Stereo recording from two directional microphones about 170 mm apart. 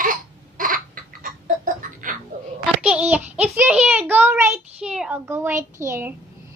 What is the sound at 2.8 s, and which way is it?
Child singing, 5° right (ahead or behind).